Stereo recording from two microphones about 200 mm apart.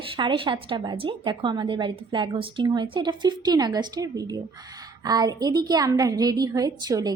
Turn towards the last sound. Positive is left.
turn(degrees=-20)  # may be behind; listen again after turning